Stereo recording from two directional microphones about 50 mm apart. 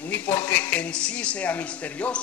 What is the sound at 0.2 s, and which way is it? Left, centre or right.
A man's voice, left.